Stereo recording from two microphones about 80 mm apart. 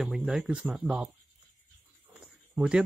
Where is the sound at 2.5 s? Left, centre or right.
Centre.